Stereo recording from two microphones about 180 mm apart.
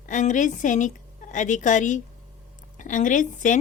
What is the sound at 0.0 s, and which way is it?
A woman's voice, 45° left (ahead or behind).